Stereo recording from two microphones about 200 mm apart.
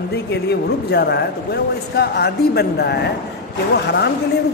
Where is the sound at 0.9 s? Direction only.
55° left (ahead or behind).